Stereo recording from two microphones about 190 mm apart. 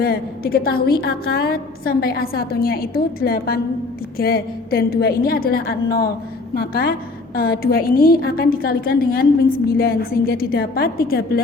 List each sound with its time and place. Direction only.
0.0 s a woman's voice: 50° left (ahead or behind)